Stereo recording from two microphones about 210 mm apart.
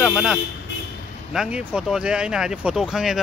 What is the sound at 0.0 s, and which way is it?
Speech, centre (ahead or behind).